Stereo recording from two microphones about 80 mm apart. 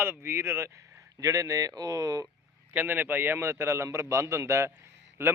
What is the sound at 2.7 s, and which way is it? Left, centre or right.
A man's voice, right.